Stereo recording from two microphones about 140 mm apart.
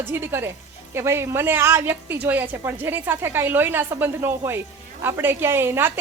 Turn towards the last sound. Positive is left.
turn(degrees=-15)  # may be behind; listen again after turning